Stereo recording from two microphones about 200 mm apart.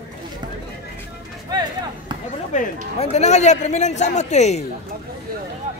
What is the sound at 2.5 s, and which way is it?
A man's voice, 40° left (ahead or behind).